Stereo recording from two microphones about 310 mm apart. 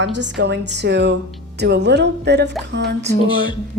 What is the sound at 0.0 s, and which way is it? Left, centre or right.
A woman's voice, right.